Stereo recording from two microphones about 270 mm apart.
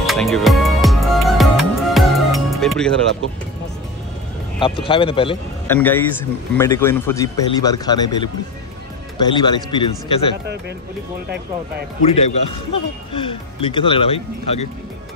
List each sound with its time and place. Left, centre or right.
0.0 s music: centre
4.6 s speech: centre
5.7 s speech: centre
12.1 s speech: left